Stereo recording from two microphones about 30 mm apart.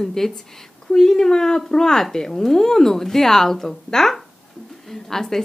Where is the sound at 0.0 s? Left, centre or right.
Centre.